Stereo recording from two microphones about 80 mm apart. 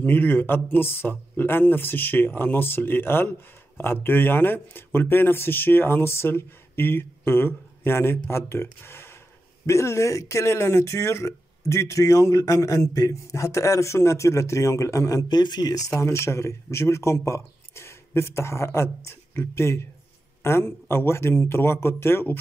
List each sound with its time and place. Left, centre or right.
0.0 s speech: left
8.8 s a sound: left
9.7 s speech: left
15.2 s speech: left